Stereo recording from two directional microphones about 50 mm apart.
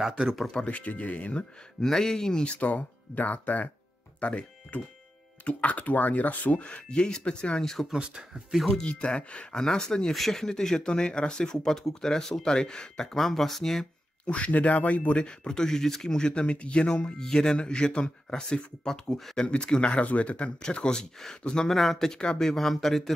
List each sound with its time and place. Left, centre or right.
0.0 s speech: centre
0.5 s speech: left
1.8 s speech: centre; by 6.6 s left
6.6 s speech: centre
7.9 s speech: centre
8.8 s speech: left; by 13.8 s centre
14.2 s speech: left; by 23.1 s centre